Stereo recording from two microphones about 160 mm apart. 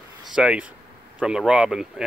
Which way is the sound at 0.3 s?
5° right (ahead or behind).